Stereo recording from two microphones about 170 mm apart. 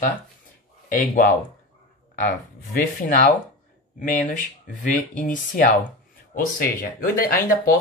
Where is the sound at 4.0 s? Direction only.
50° left (ahead or behind).